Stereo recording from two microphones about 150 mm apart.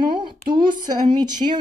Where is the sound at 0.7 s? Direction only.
30° right (ahead or behind).